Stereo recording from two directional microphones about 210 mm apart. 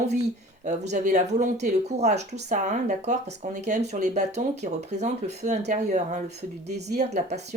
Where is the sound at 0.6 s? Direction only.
35° right (ahead or behind).